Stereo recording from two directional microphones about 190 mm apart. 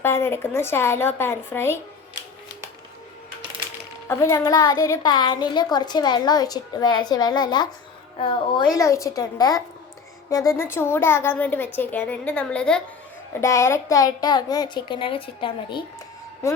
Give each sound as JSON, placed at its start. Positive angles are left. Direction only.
{"t": 0.0, "sound": "speech", "side_deg": 10}
{"t": 4.1, "sound": "a woman's voice", "side_deg": 15}
{"t": 13.4, "sound": "speech", "side_deg": 15}